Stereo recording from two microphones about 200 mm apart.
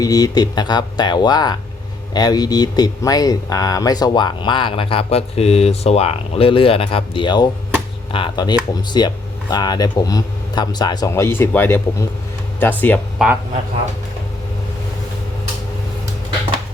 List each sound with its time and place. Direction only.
0.0 s speech: 20° left (ahead or behind)
13.2 s speech: 5° right (ahead or behind)